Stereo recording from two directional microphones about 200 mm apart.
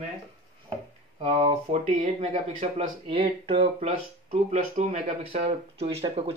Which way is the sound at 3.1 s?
25° right (ahead or behind).